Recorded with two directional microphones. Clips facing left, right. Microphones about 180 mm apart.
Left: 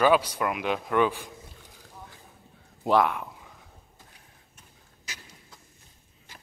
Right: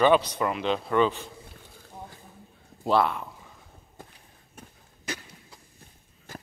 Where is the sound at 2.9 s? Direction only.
15° left (ahead or behind).